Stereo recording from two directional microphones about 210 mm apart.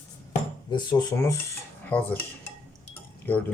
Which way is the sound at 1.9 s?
10° left (ahead or behind).